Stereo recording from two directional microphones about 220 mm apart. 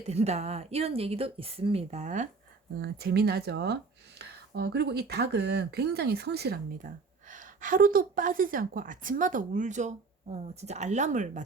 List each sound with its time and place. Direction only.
0.1 s speech: 30° right (ahead or behind)
2.8 s speech: 45° right (ahead or behind)